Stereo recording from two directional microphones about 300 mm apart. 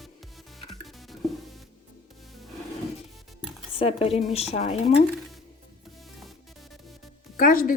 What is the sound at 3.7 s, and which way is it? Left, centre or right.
A woman's voice, centre.